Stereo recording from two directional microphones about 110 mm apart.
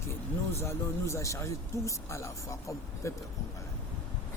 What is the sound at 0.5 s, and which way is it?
Speech, 25° left (ahead or behind).